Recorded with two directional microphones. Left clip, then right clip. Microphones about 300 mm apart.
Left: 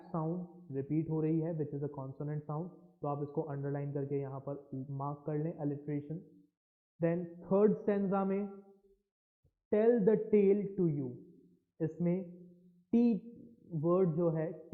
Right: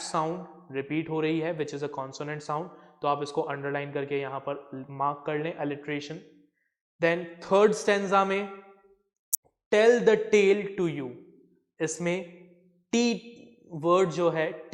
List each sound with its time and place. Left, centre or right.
0.1 s speech: centre
9.7 s speech: centre
12.9 s a sound: centre
13.7 s a man's voice: right
13.9 s speech: centre